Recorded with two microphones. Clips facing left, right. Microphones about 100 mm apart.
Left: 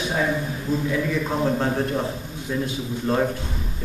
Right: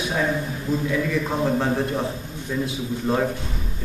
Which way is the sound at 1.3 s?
Centre (ahead or behind).